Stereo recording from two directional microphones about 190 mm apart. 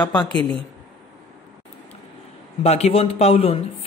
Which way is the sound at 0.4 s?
25° right (ahead or behind).